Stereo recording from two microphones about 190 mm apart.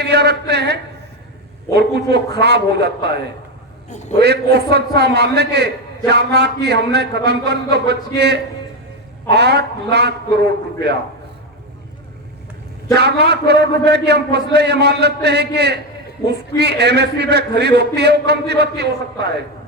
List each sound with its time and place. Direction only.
0.0 s a man's voice: 60° right (ahead or behind)
3.8 s a man's voice: 35° left (ahead or behind)
4.2 s a man's voice: 60° right (ahead or behind)
13.0 s a man's voice: 60° right (ahead or behind)